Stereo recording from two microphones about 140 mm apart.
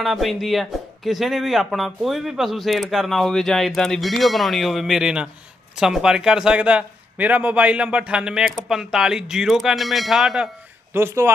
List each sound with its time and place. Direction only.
0.0 s speech: centre (ahead or behind)
10.9 s speech: 15° right (ahead or behind)